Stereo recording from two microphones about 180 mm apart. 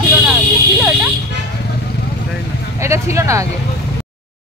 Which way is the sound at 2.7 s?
15° right (ahead or behind).